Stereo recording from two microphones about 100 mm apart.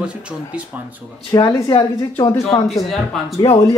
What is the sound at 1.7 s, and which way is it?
Speech, 50° left (ahead or behind).